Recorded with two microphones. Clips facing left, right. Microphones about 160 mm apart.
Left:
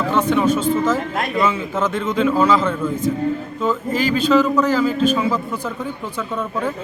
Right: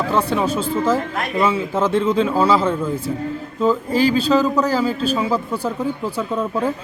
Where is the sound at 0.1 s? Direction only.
35° right (ahead or behind).